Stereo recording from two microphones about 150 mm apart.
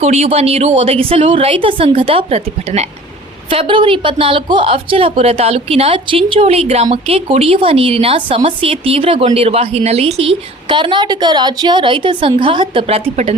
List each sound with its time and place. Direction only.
0.0 s a woman's voice: 45° right (ahead or behind)